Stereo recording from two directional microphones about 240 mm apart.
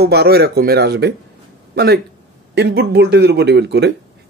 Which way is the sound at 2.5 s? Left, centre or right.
Right.